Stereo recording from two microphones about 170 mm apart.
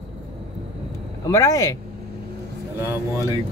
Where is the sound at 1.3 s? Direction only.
20° left (ahead or behind).